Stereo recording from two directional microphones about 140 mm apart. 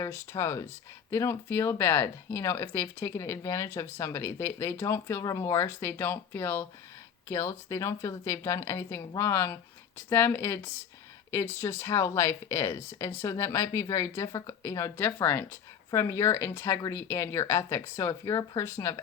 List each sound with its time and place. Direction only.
0.0 s speech: 20° left (ahead or behind)